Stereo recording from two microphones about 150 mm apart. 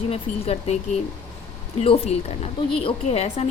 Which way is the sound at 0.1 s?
45° left (ahead or behind).